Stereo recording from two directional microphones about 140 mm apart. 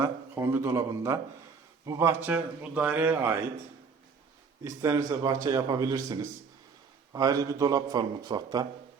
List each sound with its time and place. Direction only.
0.0 s a man's voice: 20° right (ahead or behind)
4.6 s a man's voice: 20° right (ahead or behind)